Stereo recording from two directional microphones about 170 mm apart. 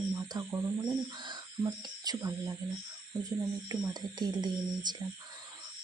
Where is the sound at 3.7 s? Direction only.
25° right (ahead or behind).